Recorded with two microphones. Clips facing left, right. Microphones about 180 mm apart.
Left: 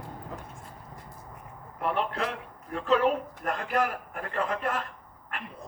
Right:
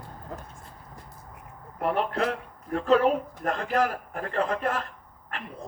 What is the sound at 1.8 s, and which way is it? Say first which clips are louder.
A man's voice: right 3 dB; 40° right (ahead or behind).